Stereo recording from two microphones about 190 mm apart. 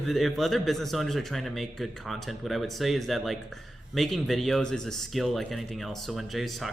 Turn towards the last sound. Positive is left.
turn(degrees=0)  # may be behind; listen again after turning